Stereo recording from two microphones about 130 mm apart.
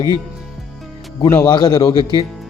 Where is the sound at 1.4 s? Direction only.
35° left (ahead or behind).